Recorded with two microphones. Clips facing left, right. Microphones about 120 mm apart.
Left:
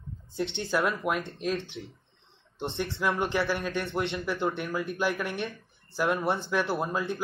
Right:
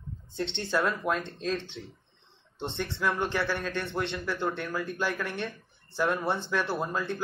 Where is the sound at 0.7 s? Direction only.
25° left (ahead or behind).